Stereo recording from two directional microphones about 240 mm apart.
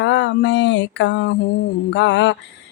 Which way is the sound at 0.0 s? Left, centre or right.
Left.